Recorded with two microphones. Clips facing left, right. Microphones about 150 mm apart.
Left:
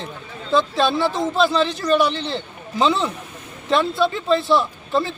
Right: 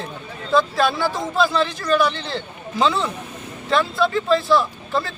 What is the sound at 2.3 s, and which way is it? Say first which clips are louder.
A man's voice: left 1 dB; centre (ahead or behind).